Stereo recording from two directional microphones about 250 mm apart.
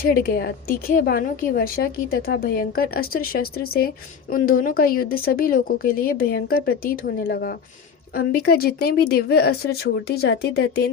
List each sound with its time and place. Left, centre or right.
0.0 s a woman's voice: left